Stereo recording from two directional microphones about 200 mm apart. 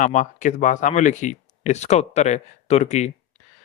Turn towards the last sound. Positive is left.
turn(degrees=35)  # may be behind; listen again after turning